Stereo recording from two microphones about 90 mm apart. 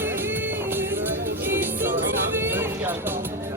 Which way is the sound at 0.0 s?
25° right (ahead or behind).